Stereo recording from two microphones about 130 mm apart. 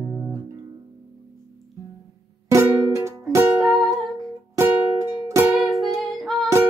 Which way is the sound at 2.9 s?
20° right (ahead or behind).